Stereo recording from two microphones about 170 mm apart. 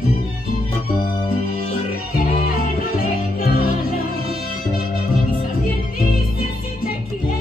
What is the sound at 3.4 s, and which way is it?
Music, 60° left (ahead or behind).